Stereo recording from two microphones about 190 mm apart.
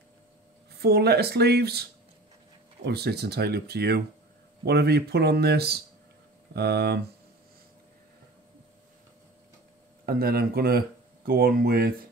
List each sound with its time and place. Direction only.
0.7 s speech: 60° right (ahead or behind)
10.0 s speech: 55° right (ahead or behind)